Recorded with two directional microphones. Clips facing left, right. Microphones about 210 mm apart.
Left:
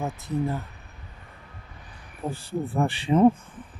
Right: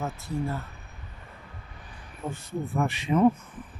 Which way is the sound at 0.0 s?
20° left (ahead or behind).